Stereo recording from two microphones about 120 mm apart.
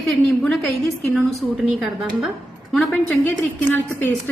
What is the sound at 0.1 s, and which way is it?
A woman's voice, centre (ahead or behind).